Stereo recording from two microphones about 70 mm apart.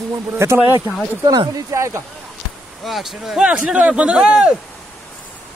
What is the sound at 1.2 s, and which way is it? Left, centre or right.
Speech, right.